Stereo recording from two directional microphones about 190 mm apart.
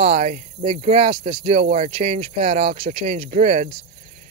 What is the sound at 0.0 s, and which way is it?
Speech, 35° right (ahead or behind).